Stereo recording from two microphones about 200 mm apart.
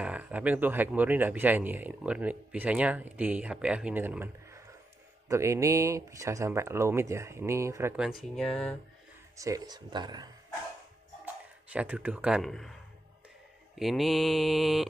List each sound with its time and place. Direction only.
0.0 s speech: 5° right (ahead or behind)
9.4 s speech: 20° right (ahead or behind)
11.2 s speech: 5° right (ahead or behind)
13.7 s mantra: centre (ahead or behind)